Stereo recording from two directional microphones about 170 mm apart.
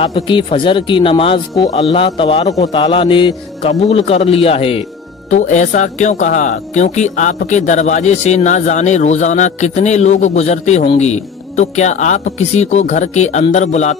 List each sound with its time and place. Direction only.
0.0 s a man's voice: 30° left (ahead or behind)
5.3 s speech: 45° left (ahead or behind)